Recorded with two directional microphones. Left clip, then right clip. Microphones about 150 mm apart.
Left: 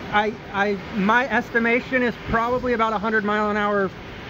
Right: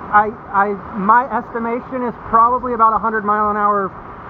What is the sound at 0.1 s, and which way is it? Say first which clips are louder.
Speech: right 8 dB; 15° left (ahead or behind).